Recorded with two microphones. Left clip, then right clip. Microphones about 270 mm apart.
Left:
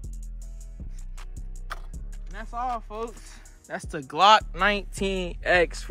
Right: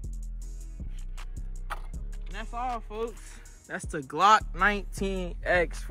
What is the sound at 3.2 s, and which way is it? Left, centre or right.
Speech, centre.